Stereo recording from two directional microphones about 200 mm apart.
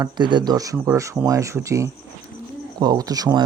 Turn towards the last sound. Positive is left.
turn(degrees=-20)  # may be behind; listen again after turning